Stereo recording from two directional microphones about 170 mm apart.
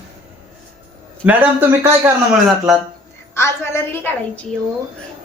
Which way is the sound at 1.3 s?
10° right (ahead or behind).